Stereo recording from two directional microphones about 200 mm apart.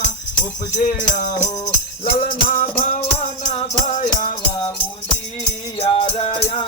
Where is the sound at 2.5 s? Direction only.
40° left (ahead or behind).